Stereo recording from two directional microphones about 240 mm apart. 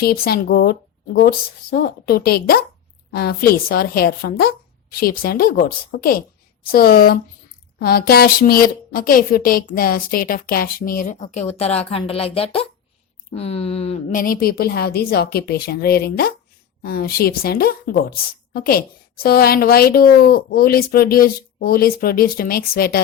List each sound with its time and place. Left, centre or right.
0.0 s a woman's voice: left